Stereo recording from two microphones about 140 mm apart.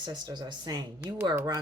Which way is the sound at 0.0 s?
30° right (ahead or behind).